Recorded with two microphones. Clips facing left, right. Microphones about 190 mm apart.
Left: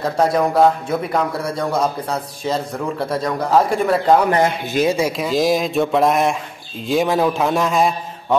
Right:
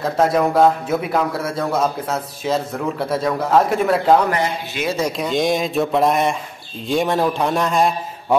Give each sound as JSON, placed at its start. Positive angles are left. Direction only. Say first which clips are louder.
{"t": 0.0, "sound": "a man's voice", "louder": "even", "side_deg": 0}
{"t": 4.4, "sound": "a man's voice", "louder": "left 5 dB", "side_deg": 50}
{"t": 4.8, "sound": "a man's voice", "louder": "even", "side_deg": 10}